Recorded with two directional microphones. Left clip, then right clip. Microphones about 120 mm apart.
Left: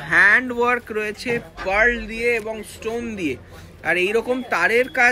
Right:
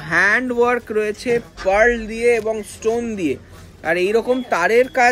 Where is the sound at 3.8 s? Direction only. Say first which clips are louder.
Right 2 dB; 75° right (ahead or behind).